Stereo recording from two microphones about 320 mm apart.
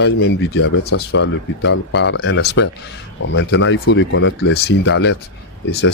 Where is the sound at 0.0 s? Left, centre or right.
Left.